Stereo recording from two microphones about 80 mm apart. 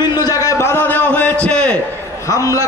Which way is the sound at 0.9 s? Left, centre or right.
Centre.